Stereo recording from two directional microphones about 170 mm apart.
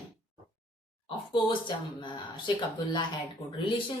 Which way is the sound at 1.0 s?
30° left (ahead or behind).